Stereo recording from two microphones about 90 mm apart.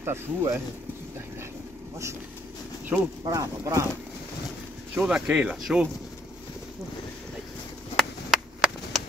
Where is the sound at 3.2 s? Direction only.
40° right (ahead or behind).